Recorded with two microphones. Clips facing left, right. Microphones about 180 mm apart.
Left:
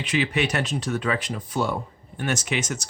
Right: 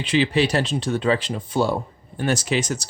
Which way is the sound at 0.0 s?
30° right (ahead or behind).